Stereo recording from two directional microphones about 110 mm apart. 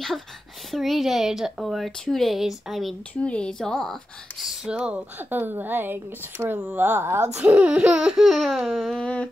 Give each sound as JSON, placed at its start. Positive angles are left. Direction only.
{"t": 0.7, "sound": "speech", "side_deg": 0}
{"t": 7.4, "sound": "speech", "side_deg": -10}